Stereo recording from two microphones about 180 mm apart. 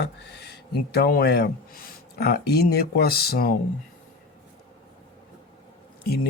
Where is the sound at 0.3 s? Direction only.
65° left (ahead or behind).